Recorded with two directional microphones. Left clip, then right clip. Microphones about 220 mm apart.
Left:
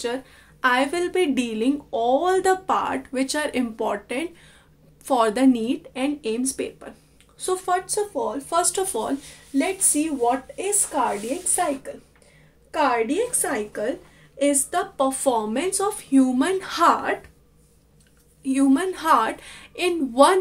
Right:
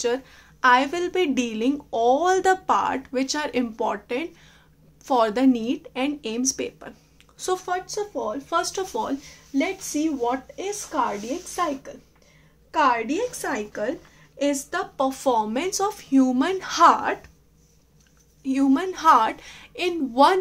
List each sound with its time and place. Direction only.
0.0 s a woman's voice: 15° right (ahead or behind)
10.2 s a woman's voice: 5° right (ahead or behind)
18.4 s a woman's voice: 10° right (ahead or behind)